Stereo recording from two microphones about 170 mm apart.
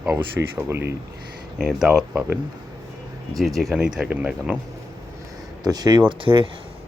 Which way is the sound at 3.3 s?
Centre (ahead or behind).